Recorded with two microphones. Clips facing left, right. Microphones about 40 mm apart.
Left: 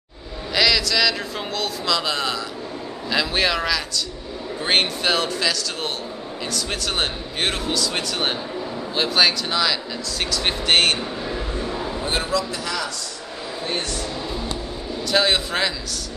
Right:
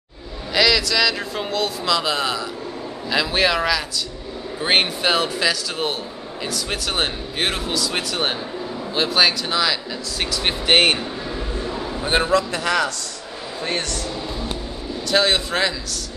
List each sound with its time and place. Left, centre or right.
0.6 s speech: centre
11.2 s a sound: centre
12.0 s a man's voice: right
15.0 s speech: centre